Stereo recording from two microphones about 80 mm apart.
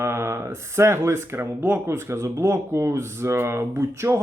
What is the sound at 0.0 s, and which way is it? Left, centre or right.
Speech, right.